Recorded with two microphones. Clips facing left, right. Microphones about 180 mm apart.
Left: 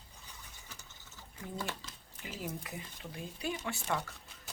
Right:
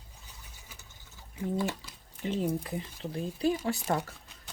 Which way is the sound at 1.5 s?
15° right (ahead or behind).